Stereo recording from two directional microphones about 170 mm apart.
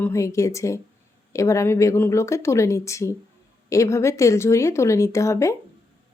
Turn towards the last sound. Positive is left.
turn(degrees=15)  # may be behind; listen again after turning